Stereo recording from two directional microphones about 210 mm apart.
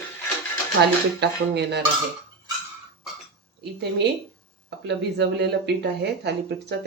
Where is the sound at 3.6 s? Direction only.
55° right (ahead or behind).